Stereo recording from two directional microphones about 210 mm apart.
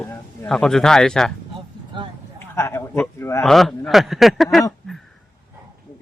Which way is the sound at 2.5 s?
10° left (ahead or behind).